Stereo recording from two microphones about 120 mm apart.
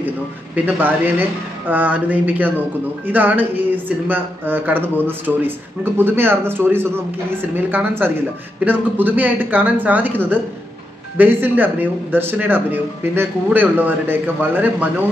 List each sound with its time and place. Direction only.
0.7 s speech: 15° right (ahead or behind)